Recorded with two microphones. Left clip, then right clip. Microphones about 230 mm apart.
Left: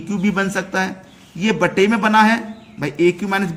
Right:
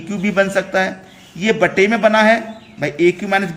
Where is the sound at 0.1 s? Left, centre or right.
Left.